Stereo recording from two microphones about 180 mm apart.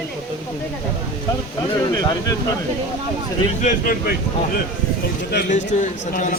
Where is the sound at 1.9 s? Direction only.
20° left (ahead or behind).